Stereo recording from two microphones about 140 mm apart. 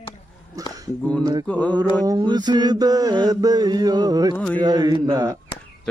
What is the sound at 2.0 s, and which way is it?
Mantra, 30° right (ahead or behind).